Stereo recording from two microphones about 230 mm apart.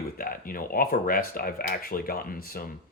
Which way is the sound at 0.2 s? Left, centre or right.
Left.